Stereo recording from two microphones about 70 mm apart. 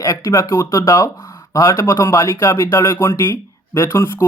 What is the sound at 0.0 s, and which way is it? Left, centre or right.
Speech, left.